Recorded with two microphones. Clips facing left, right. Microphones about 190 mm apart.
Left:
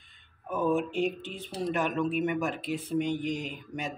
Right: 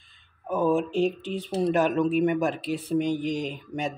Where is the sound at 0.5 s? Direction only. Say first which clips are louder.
Right 4 dB; 30° right (ahead or behind).